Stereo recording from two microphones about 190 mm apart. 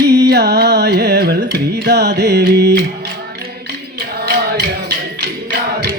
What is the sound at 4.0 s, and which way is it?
Music, 55° right (ahead or behind).